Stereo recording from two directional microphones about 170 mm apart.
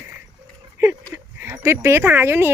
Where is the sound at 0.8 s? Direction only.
15° right (ahead or behind).